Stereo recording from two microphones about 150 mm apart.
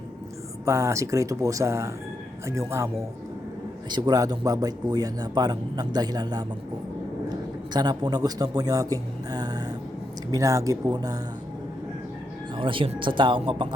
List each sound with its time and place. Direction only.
0.6 s a man's voice: 20° right (ahead or behind)
3.8 s a man's voice: 30° right (ahead or behind)
12.5 s speech: 35° right (ahead or behind)